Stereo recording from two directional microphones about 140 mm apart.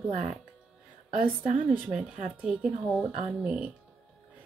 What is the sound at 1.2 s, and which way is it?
Speech, 60° right (ahead or behind).